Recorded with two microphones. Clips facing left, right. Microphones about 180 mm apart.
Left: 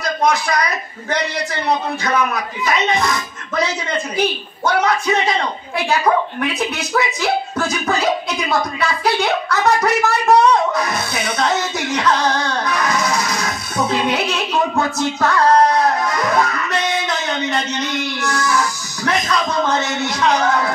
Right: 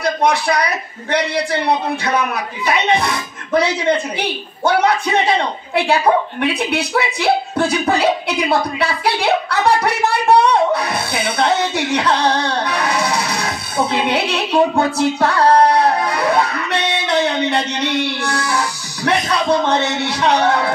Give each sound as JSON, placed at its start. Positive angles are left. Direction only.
{"t": 0.0, "sound": "a man's voice", "side_deg": -30}